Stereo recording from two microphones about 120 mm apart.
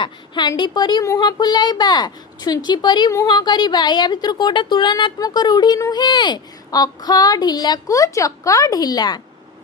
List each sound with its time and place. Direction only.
0.0 s a woman's voice: 40° left (ahead or behind)